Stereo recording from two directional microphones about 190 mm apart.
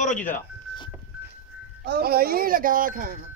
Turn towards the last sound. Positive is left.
turn(degrees=-45)  # may be behind; listen again after turning